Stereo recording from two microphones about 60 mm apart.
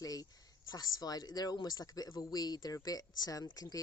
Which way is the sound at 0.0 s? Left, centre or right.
Left.